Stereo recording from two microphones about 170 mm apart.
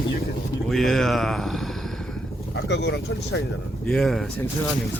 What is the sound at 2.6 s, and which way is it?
Speech, 90° left.